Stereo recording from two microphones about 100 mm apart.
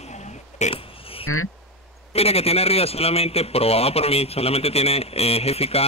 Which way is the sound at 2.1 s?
90° left.